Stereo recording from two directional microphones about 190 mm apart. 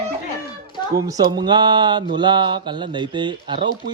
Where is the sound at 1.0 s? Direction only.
20° right (ahead or behind).